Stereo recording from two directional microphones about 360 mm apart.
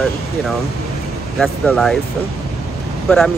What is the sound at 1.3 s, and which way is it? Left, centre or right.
Speech, centre.